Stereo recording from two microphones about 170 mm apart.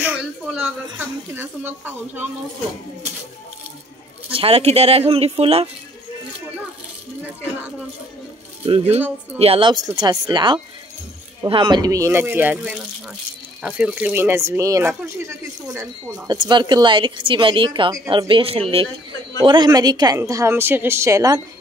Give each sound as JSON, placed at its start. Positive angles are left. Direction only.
{"t": 0.0, "sound": "a sound", "side_deg": -5}
{"t": 0.9, "sound": "speech", "side_deg": -10}
{"t": 4.3, "sound": "speech", "side_deg": -35}
{"t": 8.6, "sound": "speech", "side_deg": -35}